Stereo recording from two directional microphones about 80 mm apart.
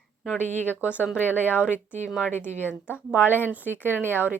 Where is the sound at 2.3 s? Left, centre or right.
Left.